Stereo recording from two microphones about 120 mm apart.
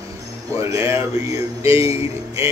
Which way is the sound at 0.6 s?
25° right (ahead or behind).